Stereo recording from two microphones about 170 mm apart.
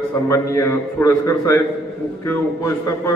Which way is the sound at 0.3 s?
15° left (ahead or behind).